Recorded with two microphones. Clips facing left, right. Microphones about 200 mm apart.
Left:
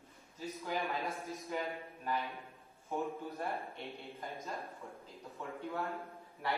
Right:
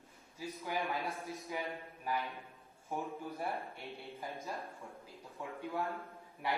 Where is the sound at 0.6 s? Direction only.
15° right (ahead or behind).